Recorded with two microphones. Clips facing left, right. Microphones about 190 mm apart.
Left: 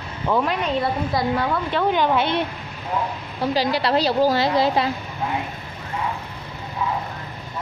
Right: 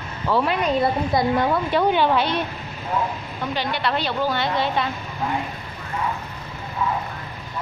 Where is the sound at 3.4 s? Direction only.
35° left (ahead or behind).